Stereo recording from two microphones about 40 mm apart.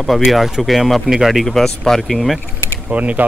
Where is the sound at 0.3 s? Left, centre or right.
Centre.